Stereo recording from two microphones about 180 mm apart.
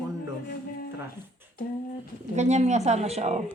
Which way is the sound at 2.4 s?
40° right (ahead or behind).